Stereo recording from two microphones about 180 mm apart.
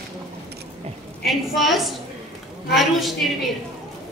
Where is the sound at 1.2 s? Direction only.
Centre (ahead or behind).